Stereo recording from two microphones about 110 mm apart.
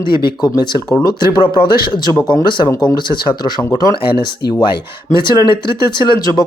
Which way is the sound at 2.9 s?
40° left (ahead or behind).